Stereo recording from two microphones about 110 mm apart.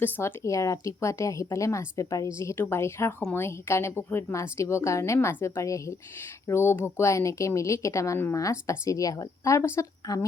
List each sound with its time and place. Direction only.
0.0 s a woman's voice: 20° left (ahead or behind)
10.0 s speech: 35° left (ahead or behind)